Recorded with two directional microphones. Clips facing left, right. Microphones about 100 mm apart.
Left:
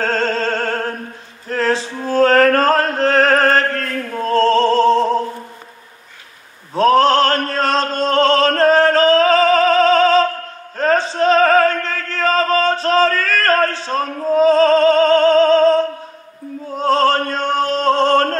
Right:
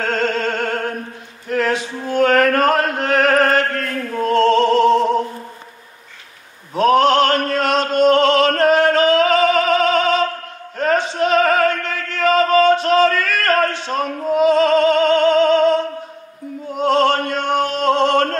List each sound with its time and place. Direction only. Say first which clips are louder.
0.0 s music: left 1 dB; 35° left (ahead or behind)
1.5 s chant: left 1 dB; 30° left (ahead or behind)
4.2 s music: even; 35° left (ahead or behind)
6.7 s a sound: left 1 dB; 35° left (ahead or behind)
10.8 s music: left 2 dB; 35° left (ahead or behind)